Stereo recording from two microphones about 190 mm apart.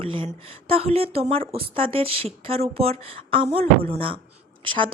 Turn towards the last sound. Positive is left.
turn(degrees=-25)  # may be behind; listen again after turning